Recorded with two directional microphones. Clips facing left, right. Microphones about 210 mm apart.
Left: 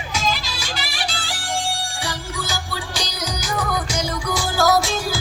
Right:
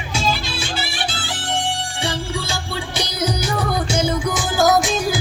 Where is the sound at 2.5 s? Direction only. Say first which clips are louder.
Right 3 dB; 25° right (ahead or behind).